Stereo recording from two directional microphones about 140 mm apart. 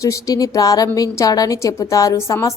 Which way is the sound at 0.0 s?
25° left (ahead or behind).